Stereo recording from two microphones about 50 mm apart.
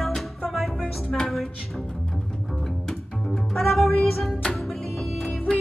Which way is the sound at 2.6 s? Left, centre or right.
Centre.